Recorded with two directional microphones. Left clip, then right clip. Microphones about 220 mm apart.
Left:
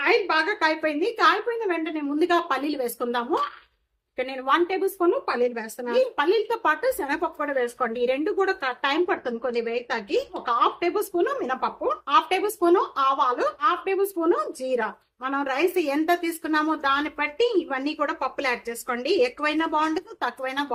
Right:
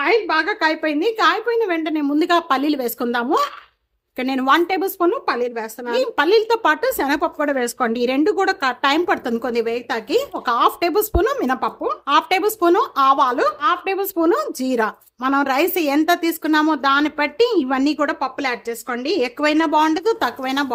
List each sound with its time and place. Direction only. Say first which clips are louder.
0.0 s a woman's voice: right 4 dB; 40° right (ahead or behind)